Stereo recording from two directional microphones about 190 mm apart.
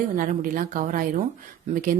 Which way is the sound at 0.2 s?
45° right (ahead or behind).